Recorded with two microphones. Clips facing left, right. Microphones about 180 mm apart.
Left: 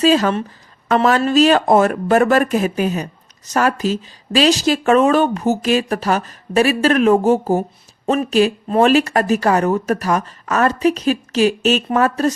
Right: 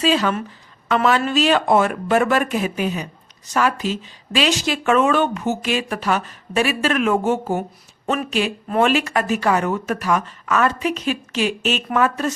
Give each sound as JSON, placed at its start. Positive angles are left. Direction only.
{"t": 0.0, "sound": "speech", "side_deg": 40}